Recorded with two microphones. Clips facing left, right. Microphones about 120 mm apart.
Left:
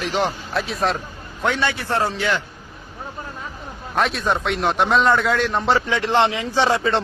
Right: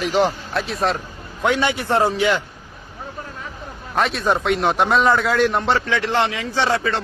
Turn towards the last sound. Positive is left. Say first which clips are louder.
# left 1 dB
turn(degrees=15)  # may be behind; listen again after turning